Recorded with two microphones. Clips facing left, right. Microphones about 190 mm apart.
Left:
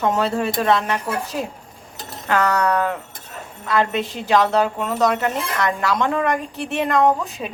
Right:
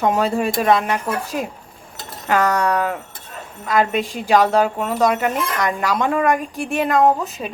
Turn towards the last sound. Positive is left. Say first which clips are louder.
# right 1 dB
turn(degrees=-5)  # may be behind; listen again after turning